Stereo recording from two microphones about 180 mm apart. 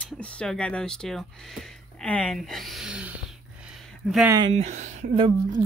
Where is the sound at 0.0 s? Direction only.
5° left (ahead or behind).